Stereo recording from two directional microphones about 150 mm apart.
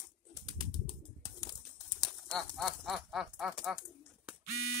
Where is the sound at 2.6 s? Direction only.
Centre (ahead or behind).